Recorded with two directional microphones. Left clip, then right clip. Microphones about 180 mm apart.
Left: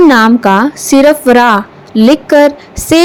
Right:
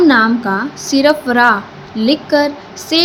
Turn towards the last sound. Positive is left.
turn(degrees=50)  # may be behind; listen again after turning